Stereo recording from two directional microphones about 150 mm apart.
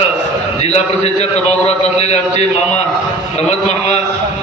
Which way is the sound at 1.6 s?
50° left (ahead or behind).